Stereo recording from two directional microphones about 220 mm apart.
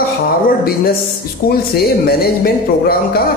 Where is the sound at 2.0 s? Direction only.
45° left (ahead or behind).